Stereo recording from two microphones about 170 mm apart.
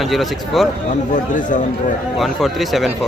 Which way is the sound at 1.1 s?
50° left (ahead or behind).